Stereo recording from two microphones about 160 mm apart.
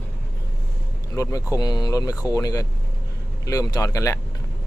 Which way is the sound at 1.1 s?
20° left (ahead or behind).